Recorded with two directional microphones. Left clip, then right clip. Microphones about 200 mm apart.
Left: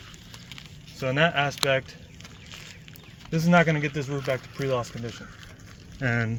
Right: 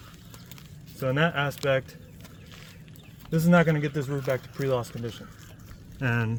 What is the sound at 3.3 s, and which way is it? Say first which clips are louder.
Speech: left 1 dB; 55° right (ahead or behind).